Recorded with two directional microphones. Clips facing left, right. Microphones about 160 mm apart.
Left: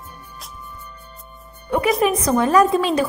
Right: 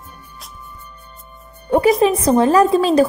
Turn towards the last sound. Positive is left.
turn(degrees=-35)  # may be behind; listen again after turning